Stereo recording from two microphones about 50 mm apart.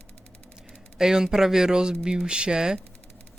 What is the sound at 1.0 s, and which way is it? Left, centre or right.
Speech, centre.